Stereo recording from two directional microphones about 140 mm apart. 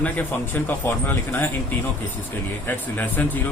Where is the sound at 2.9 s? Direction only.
15° left (ahead or behind).